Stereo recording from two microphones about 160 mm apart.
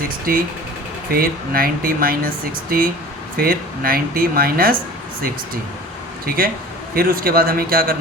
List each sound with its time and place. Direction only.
0.3 s speech: 65° right (ahead or behind)
6.2 s speech: 65° right (ahead or behind)